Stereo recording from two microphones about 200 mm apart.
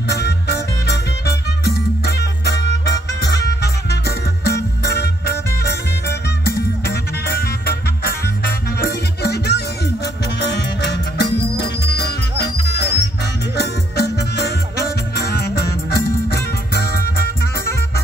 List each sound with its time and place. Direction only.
0.1 s music: 55° left (ahead or behind)
4.5 s music: 55° left (ahead or behind)